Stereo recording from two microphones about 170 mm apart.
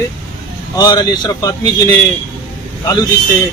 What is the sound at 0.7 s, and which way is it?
Speech, 25° left (ahead or behind).